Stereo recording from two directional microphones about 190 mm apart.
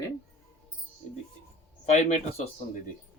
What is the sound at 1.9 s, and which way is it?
Speech, 40° left (ahead or behind).